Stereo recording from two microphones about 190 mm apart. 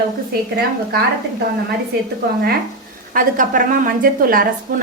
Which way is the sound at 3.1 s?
45° right (ahead or behind).